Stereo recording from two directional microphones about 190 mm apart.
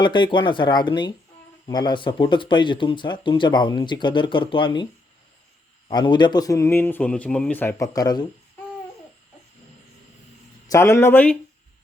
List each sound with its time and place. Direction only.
0.0 s speech: 25° left (ahead or behind)
5.9 s a man's voice: 25° left (ahead or behind)
10.7 s a man's voice: 15° left (ahead or behind)